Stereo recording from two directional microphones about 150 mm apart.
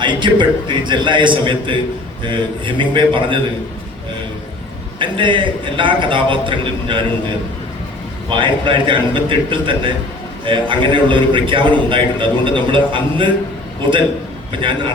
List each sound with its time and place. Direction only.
0.0 s a man's voice: 30° right (ahead or behind)
4.9 s a man's voice: 35° right (ahead or behind)
8.3 s a man's voice: 35° right (ahead or behind)